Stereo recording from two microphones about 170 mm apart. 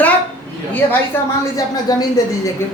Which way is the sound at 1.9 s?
20° left (ahead or behind).